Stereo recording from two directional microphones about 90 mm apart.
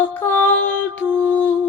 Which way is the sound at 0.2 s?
20° left (ahead or behind).